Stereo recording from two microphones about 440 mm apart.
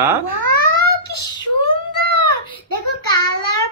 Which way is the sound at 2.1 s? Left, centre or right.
Left.